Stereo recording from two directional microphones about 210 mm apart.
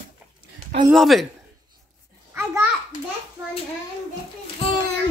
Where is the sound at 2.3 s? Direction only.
10° right (ahead or behind).